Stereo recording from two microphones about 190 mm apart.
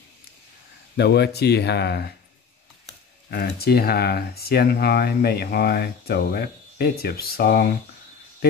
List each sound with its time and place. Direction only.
0.9 s speech: 60° left (ahead or behind)
3.3 s speech: 55° left (ahead or behind)